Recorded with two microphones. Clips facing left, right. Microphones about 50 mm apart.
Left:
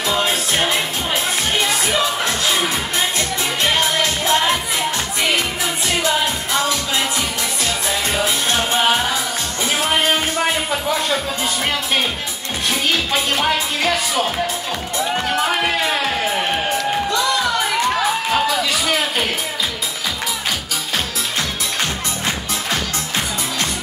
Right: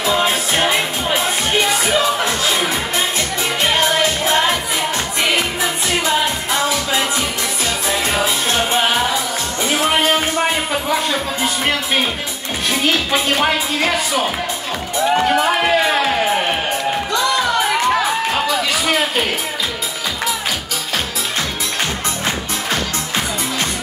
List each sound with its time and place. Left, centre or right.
0.2 s music: centre
1.9 s music: centre
7.6 s music: centre
13.1 s music: centre
17.4 s music: centre